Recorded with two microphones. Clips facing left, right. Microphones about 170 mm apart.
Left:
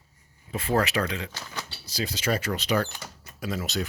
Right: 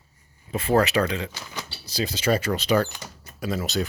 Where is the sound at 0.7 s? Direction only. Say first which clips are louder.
Right 5 dB; 30° right (ahead or behind).